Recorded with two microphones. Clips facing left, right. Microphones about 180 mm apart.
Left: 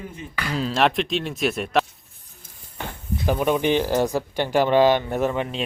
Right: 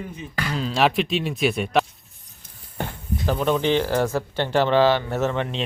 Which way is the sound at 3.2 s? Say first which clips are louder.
Left 1 dB; 15° left (ahead or behind).